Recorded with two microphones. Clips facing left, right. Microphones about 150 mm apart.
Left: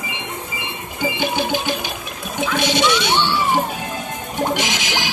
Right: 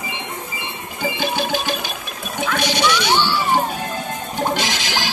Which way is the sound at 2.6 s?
20° left (ahead or behind).